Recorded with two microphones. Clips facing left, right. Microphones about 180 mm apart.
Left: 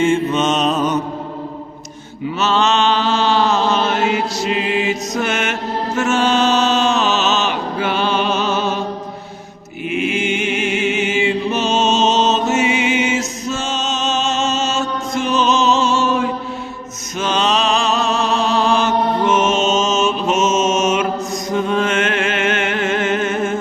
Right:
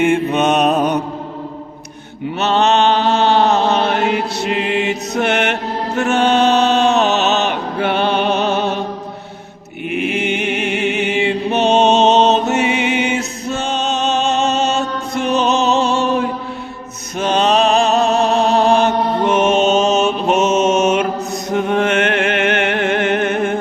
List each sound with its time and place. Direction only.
0.0 s mantra: 60° right (ahead or behind)
2.4 s mantra: 60° right (ahead or behind)
9.9 s chant: 60° right (ahead or behind)
11.5 s music: 60° right (ahead or behind)
17.2 s mantra: 55° right (ahead or behind)
21.5 s music: 65° right (ahead or behind)